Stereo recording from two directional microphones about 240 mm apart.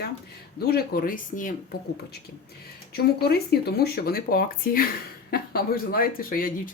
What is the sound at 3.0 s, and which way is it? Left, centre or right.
Speech, left.